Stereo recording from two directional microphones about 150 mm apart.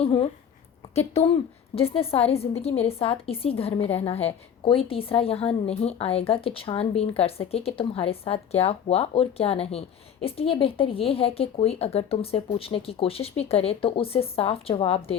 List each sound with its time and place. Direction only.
0.0 s a woman's voice: 35° left (ahead or behind)